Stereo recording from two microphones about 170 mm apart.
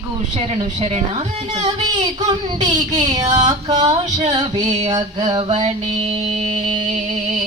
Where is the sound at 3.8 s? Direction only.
40° right (ahead or behind).